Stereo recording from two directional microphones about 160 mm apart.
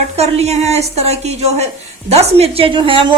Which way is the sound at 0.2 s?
40° right (ahead or behind).